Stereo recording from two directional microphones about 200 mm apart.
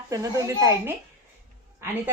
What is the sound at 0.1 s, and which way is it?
A woman's voice, 15° right (ahead or behind).